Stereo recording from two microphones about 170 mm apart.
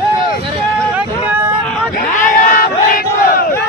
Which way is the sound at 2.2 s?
55° left (ahead or behind).